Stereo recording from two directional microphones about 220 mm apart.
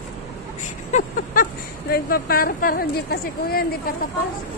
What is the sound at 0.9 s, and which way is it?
Speech, 40° left (ahead or behind).